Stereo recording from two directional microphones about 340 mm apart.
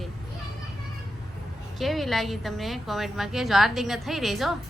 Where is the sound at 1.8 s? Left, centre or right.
Centre.